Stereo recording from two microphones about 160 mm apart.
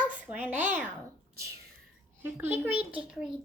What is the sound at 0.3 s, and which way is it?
Speech, 10° right (ahead or behind).